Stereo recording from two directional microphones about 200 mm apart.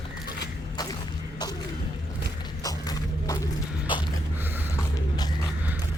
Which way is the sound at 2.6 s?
15° left (ahead or behind).